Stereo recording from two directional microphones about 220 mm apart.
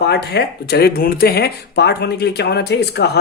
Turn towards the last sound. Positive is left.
turn(degrees=50)  # may be behind; listen again after turning